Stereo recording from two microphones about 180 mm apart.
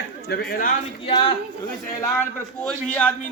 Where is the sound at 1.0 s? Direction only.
30° left (ahead or behind).